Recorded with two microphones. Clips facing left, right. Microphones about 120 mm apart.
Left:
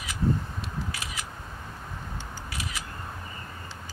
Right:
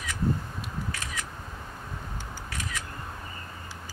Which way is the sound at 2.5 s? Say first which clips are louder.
Even; 10° left (ahead or behind).